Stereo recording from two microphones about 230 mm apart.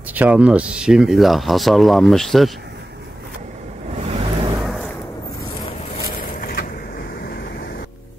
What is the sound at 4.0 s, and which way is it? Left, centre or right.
Vehicle, right.